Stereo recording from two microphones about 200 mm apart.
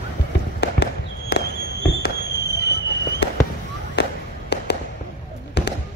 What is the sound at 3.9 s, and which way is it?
Fireworks, 55° left (ahead or behind).